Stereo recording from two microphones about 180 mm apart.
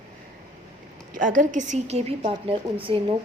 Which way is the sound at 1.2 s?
45° right (ahead or behind).